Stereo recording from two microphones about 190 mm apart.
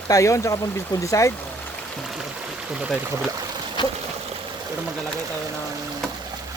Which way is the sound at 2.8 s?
Centre (ahead or behind).